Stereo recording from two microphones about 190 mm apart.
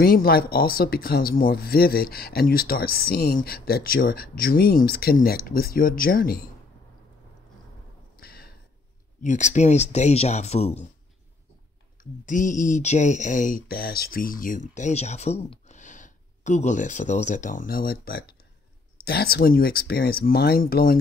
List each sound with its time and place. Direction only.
0.0 s speech: 55° left (ahead or behind)
8.2 s a sound: 55° left (ahead or behind)
9.2 s speech: 40° left (ahead or behind)
12.0 s speech: 45° left (ahead or behind)